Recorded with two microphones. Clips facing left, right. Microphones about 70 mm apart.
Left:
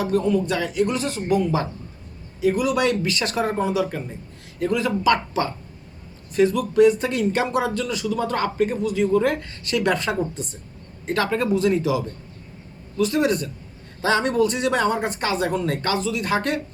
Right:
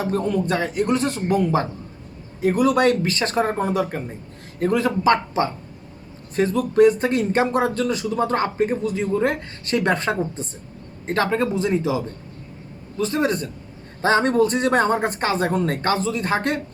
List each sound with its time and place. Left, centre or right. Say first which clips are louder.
0.0 s speech: left 1 dB; right